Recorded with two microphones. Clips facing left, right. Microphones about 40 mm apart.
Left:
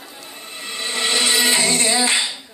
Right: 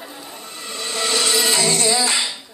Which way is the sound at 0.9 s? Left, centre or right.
Left.